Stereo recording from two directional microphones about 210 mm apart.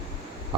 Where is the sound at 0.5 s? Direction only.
25° right (ahead or behind).